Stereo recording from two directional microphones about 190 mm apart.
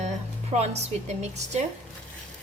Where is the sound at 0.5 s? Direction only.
35° right (ahead or behind).